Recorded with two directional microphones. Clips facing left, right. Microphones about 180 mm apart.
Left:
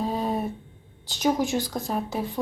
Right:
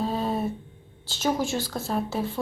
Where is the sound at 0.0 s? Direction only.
15° left (ahead or behind).